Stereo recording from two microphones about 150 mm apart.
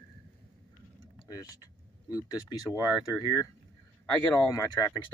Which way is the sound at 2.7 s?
15° right (ahead or behind).